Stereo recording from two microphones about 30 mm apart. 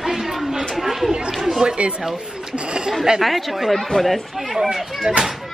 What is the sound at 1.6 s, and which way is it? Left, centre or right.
Speech, right.